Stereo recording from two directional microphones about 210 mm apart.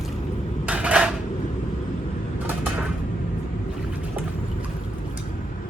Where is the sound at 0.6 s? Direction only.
5° right (ahead or behind).